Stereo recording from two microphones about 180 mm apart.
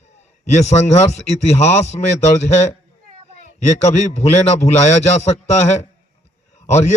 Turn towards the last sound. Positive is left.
turn(degrees=40)  # may be behind; listen again after turning